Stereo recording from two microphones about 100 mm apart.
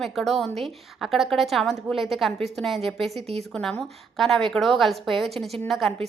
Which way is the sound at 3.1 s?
90° right.